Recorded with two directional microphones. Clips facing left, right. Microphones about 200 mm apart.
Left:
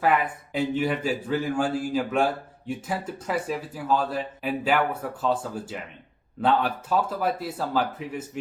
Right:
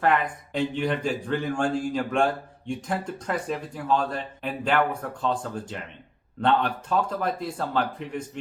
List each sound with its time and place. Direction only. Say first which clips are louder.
0.0 s speech: even; 5° left (ahead or behind)